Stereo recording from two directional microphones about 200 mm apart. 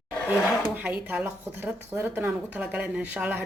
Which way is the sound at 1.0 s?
5° right (ahead or behind).